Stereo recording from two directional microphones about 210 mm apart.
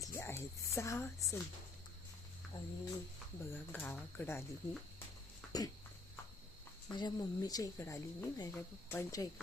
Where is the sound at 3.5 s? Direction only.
10° left (ahead or behind).